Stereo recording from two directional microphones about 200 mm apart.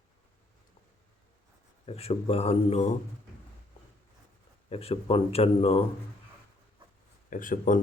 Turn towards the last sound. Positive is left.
turn(degrees=40)  # may be behind; listen again after turning